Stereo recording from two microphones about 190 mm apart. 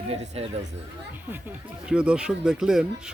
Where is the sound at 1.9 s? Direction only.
5° right (ahead or behind).